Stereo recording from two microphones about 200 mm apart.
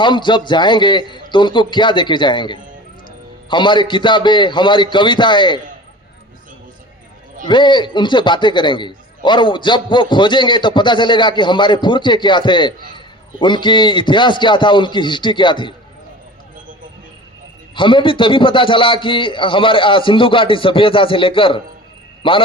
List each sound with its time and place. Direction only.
0.0 s a man's voice: 25° left (ahead or behind)
7.4 s a man's voice: 25° left (ahead or behind)
17.7 s a man's voice: 25° left (ahead or behind)